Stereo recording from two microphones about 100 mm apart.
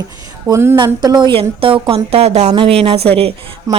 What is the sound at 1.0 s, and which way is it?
A woman's voice, 50° right (ahead or behind).